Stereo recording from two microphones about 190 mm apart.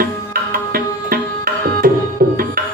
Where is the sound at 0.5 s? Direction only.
50° right (ahead or behind).